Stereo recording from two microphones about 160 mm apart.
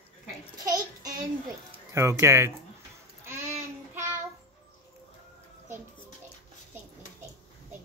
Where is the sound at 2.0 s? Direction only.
15° right (ahead or behind).